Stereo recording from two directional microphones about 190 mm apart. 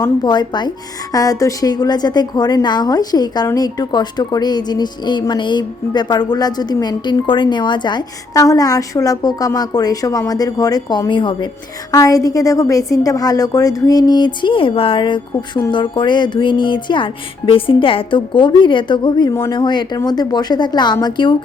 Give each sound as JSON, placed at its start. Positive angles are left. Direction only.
{"t": 0.0, "sound": "a woman's voice", "side_deg": 20}